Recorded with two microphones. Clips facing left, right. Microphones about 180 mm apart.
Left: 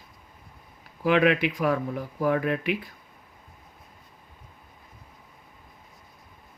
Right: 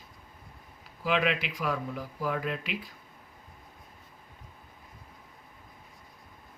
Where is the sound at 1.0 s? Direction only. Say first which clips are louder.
Left 7 dB; 60° left (ahead or behind).